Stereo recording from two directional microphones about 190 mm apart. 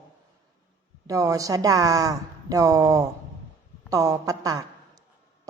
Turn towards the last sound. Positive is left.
turn(degrees=-20)  # may be behind; listen again after turning